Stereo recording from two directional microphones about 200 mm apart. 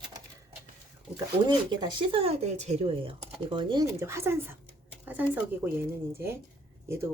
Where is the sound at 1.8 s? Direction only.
25° right (ahead or behind).